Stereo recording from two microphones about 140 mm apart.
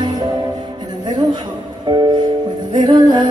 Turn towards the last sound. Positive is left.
turn(degrees=-30)  # may be behind; listen again after turning